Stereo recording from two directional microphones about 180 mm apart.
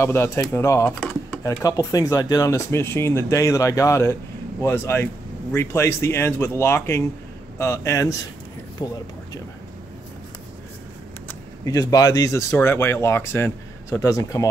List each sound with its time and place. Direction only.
0.0 s speech: 15° left (ahead or behind)
11.2 s speech: 20° left (ahead or behind)